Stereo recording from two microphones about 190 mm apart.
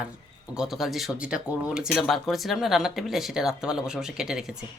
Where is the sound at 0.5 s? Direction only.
Centre (ahead or behind).